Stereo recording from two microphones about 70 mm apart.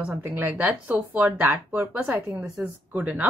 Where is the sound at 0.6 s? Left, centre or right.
Centre.